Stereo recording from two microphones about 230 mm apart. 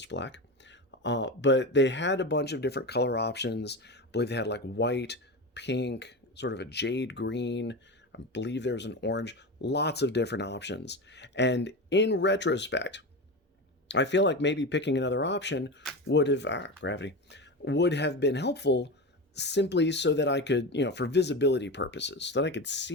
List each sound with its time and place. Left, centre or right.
0.0 s speech: left